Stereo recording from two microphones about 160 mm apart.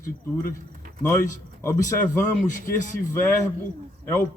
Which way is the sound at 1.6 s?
15° left (ahead or behind).